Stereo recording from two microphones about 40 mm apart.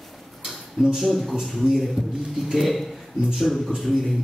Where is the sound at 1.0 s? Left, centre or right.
Centre.